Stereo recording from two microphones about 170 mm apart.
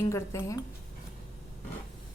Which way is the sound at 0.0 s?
15° left (ahead or behind).